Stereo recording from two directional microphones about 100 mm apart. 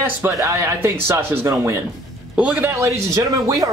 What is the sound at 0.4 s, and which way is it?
Speech, 25° right (ahead or behind).